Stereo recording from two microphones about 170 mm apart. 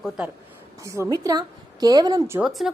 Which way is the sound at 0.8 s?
15° right (ahead or behind).